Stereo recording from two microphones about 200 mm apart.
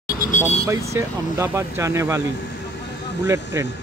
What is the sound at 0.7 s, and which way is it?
Speech, 15° right (ahead or behind).